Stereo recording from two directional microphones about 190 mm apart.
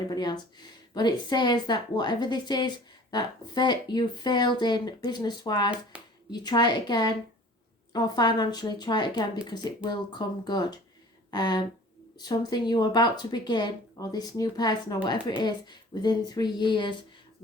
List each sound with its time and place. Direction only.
0.1 s a woman's voice: 20° left (ahead or behind)
5.9 s a sound: 5° right (ahead or behind)
6.3 s a woman's voice: 20° left (ahead or behind)